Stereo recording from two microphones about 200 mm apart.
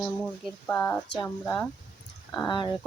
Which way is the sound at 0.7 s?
10° left (ahead or behind).